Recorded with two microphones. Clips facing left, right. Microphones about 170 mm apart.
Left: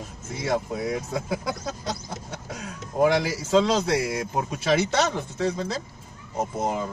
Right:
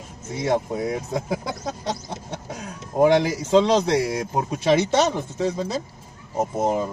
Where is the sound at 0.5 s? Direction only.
35° right (ahead or behind).